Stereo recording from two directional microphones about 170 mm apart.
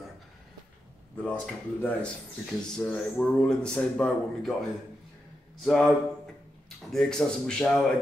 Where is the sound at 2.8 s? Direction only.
5° left (ahead or behind).